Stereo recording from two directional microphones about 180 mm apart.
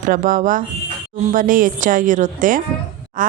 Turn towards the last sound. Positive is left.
turn(degrees=-50)  # may be behind; listen again after turning